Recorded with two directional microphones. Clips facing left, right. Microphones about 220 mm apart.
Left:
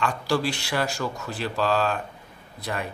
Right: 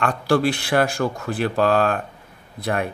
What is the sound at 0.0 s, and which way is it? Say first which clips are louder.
A man's voice: right 6 dB; 55° right (ahead or behind).